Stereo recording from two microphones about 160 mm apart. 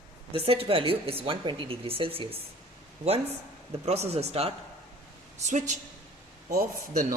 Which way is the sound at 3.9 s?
40° right (ahead or behind).